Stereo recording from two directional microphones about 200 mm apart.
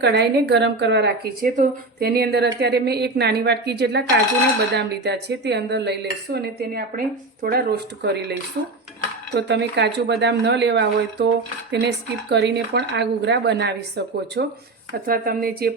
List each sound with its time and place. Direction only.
0.0 s a woman's voice: 60° right (ahead or behind)